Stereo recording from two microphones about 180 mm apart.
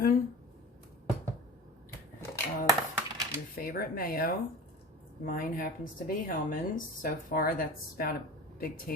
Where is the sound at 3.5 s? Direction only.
55° left (ahead or behind).